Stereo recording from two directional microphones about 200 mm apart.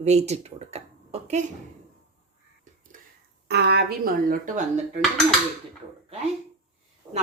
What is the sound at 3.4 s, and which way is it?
A woman's voice, 55° right (ahead or behind).